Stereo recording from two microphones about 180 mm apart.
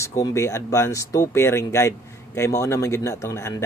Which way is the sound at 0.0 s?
15° left (ahead or behind).